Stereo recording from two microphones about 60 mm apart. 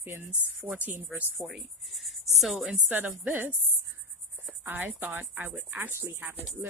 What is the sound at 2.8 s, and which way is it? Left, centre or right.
Speech, right.